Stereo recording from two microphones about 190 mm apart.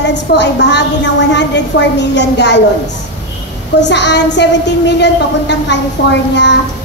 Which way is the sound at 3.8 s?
65° left (ahead or behind).